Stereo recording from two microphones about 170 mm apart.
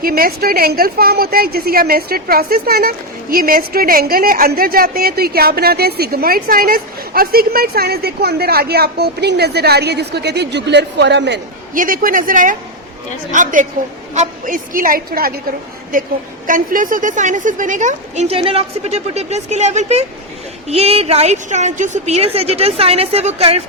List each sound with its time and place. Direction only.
0.0 s a woman's voice: 60° right (ahead or behind); by 11.3 s 90° right
11.7 s a woman's voice: 55° right (ahead or behind)
16.5 s a woman's voice: 50° right (ahead or behind); by 23.6 s 35° right (ahead or behind)